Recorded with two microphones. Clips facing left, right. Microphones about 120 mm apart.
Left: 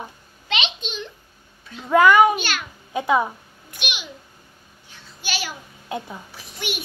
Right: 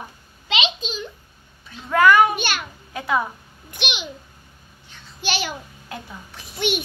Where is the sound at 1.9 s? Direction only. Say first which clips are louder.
Left 1 dB; 15° left (ahead or behind).